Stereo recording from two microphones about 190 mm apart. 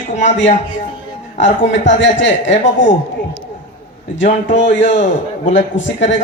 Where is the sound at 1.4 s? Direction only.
75° left (ahead or behind).